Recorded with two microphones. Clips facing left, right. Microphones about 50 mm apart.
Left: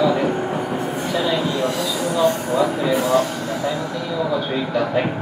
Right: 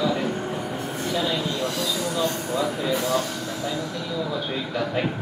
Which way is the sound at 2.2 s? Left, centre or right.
Centre.